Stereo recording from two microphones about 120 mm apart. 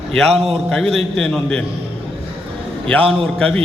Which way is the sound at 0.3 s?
55° right (ahead or behind).